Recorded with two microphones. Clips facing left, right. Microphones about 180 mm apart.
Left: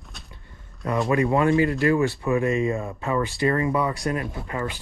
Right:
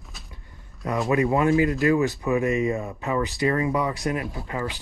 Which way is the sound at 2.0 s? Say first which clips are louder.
Even; 20° right (ahead or behind).